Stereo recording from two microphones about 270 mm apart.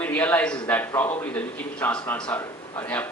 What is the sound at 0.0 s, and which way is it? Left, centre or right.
A man's voice, centre.